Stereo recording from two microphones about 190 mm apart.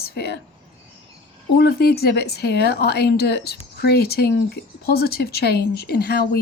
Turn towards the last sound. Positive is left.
turn(degrees=55)  # may be behind; listen again after turning